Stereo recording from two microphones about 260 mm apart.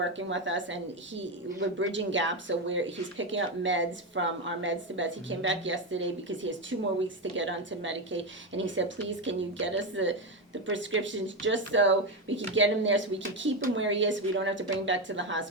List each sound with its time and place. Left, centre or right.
0.2 s a woman's voice: right